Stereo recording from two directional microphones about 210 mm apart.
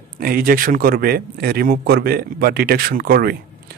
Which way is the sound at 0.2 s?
45° right (ahead or behind).